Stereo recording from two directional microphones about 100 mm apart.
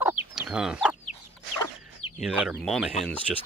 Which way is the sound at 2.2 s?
10° right (ahead or behind).